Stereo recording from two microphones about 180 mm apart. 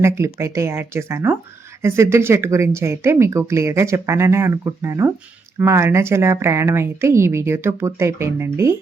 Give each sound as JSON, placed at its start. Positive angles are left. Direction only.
{"t": 0.3, "sound": "speech", "side_deg": -15}